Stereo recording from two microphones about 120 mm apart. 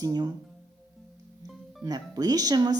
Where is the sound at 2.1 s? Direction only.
35° right (ahead or behind).